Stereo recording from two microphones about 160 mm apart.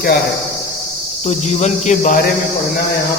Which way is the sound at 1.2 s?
45° left (ahead or behind).